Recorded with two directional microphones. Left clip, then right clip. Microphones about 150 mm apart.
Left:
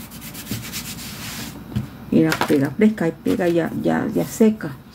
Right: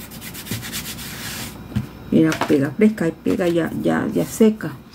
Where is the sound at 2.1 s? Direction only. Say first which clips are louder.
Right 1 dB; 10° right (ahead or behind).